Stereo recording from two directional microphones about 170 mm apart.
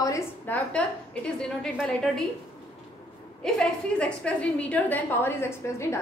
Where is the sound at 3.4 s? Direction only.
5° left (ahead or behind).